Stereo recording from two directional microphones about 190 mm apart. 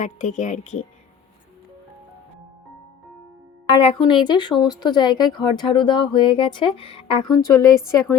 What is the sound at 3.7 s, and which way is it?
A woman's voice, 30° left (ahead or behind).